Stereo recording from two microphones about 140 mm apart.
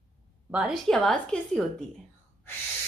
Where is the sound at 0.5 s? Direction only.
5° right (ahead or behind).